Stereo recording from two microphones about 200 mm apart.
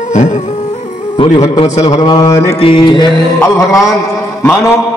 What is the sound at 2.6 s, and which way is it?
Speech, 25° left (ahead or behind).